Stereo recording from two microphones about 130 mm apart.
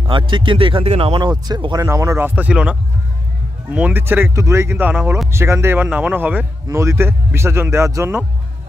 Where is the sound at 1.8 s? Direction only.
20° right (ahead or behind).